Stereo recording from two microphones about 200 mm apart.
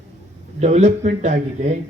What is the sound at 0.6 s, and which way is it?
A man's voice, 35° right (ahead or behind).